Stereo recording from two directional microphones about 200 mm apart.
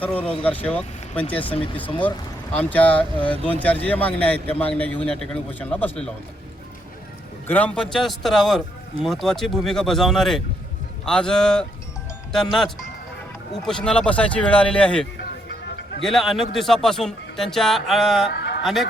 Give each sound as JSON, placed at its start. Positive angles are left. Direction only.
{"t": 0.0, "sound": "a man's voice", "side_deg": 10}
{"t": 1.5, "sound": "speech", "side_deg": 25}
{"t": 2.6, "sound": "a man's voice", "side_deg": 5}
{"t": 7.4, "sound": "speech", "side_deg": 10}
{"t": 16.0, "sound": "speech", "side_deg": 0}
{"t": 18.3, "sound": "a sound", "side_deg": 55}
{"t": 18.6, "sound": "speech", "side_deg": 0}